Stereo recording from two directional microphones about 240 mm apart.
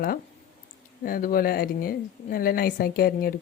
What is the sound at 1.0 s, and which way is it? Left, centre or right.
Speech, left.